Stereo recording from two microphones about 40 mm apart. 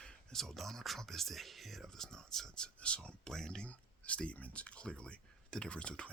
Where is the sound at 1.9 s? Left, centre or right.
Centre.